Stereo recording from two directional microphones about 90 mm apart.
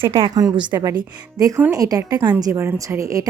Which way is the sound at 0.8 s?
45° right (ahead or behind).